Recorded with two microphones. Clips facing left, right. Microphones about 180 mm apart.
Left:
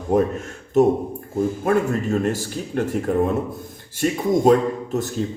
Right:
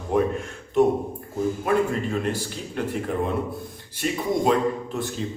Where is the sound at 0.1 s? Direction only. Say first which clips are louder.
Left 3 dB; 45° left (ahead or behind).